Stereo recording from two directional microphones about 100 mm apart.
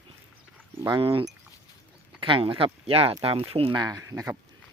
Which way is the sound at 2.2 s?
60° right (ahead or behind).